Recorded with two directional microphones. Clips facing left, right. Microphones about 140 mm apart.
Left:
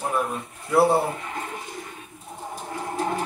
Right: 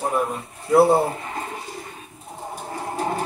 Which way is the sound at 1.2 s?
35° right (ahead or behind).